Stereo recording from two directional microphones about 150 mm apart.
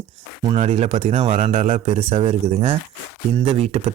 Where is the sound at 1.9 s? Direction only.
35° right (ahead or behind).